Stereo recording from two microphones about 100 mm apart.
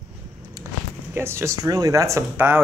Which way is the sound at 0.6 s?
35° right (ahead or behind).